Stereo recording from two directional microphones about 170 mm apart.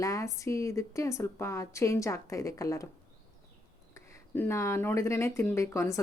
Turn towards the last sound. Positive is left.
turn(degrees=20)  # may be behind; listen again after turning